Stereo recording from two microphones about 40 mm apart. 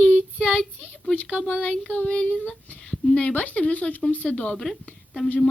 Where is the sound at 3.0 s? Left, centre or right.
Left.